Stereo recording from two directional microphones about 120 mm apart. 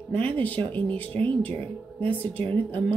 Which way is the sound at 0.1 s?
15° left (ahead or behind).